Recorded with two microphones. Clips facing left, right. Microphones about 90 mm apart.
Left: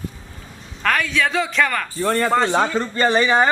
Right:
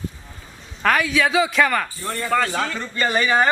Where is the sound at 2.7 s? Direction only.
30° left (ahead or behind).